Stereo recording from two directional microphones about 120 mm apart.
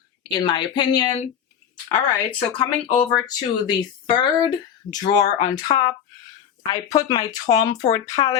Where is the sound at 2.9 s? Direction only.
40° left (ahead or behind).